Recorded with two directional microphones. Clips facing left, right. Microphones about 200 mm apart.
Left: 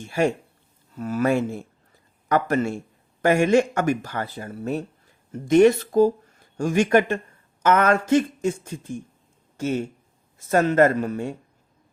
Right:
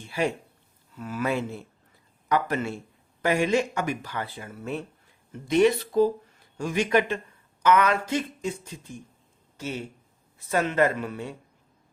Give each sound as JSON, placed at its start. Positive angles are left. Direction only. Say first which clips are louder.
{"t": 0.2, "sound": "speech", "louder": "left 5 dB", "side_deg": 45}